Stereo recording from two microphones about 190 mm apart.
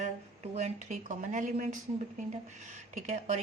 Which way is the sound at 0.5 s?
40° right (ahead or behind).